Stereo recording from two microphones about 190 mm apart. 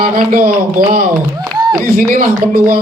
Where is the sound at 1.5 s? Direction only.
20° right (ahead or behind).